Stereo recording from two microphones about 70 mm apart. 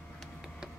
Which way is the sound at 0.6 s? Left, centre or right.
Centre.